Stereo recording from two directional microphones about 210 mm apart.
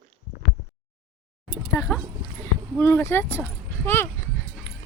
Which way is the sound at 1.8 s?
10° left (ahead or behind).